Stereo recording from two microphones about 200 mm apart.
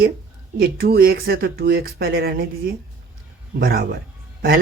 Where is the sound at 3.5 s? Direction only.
45° right (ahead or behind).